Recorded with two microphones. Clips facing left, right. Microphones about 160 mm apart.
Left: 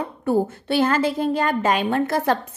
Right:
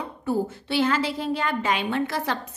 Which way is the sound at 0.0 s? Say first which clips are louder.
Left 5 dB; 55° left (ahead or behind).